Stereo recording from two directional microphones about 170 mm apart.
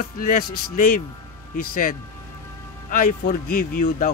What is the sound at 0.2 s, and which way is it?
Speech, 50° left (ahead or behind).